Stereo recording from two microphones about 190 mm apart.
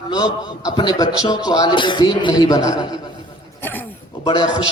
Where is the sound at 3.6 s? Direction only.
10° left (ahead or behind).